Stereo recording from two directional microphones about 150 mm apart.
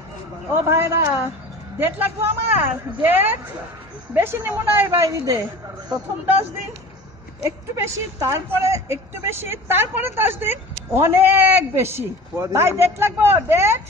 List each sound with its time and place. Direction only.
0.5 s a woman's voice: 15° right (ahead or behind)
7.4 s a woman's voice: 15° right (ahead or behind)